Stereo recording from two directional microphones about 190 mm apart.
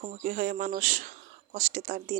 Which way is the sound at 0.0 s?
45° right (ahead or behind).